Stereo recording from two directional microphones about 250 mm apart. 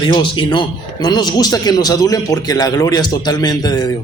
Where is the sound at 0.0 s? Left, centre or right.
Centre.